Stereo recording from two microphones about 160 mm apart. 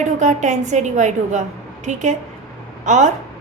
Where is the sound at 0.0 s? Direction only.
50° right (ahead or behind).